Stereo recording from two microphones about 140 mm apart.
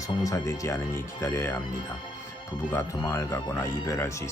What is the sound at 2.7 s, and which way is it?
Speech, 20° left (ahead or behind).